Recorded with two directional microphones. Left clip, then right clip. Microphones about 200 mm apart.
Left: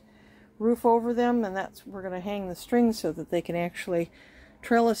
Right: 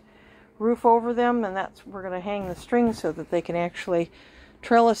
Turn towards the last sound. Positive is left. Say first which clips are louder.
# right 5 dB
turn(degrees=5)  # may be behind; listen again after turning